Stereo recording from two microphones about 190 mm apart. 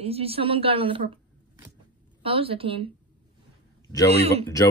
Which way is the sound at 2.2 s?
30° right (ahead or behind).